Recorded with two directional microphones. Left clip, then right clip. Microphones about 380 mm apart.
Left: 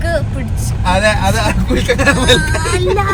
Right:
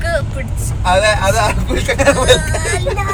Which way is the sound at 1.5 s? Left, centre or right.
Centre.